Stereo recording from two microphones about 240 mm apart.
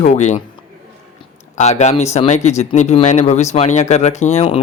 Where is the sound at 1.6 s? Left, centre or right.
Left.